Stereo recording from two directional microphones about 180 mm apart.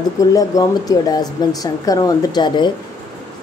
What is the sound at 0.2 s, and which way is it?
Speech, 20° left (ahead or behind).